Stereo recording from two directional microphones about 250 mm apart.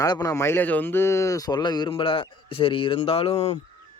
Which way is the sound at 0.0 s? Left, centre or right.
Centre.